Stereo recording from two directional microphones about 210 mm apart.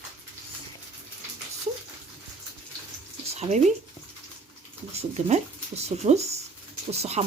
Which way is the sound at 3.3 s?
30° right (ahead or behind).